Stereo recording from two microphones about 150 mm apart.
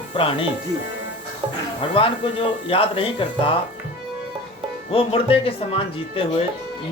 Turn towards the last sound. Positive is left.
turn(degrees=40)  # may be behind; listen again after turning